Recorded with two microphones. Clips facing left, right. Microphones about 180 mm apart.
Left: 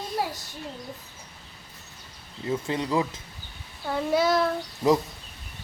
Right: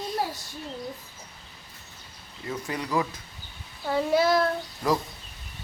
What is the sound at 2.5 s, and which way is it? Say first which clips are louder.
Speech: left 3 dB; 25° left (ahead or behind).